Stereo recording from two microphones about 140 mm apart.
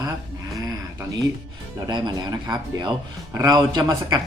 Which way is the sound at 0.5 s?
25° right (ahead or behind).